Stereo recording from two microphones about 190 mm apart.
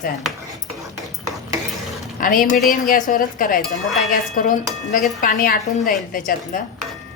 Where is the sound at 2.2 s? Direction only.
45° left (ahead or behind).